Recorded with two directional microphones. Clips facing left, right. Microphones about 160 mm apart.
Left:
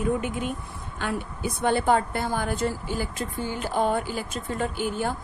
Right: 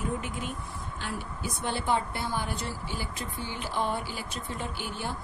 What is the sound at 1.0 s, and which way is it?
A woman's voice, 55° left (ahead or behind).